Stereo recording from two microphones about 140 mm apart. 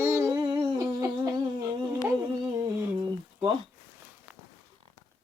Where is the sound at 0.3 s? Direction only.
35° right (ahead or behind).